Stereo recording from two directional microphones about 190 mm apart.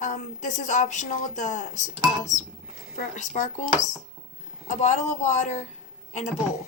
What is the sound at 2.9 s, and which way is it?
Speech, 45° left (ahead or behind).